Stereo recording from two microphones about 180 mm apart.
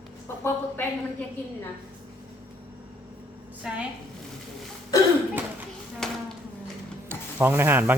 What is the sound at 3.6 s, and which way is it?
Speech, 5° right (ahead or behind).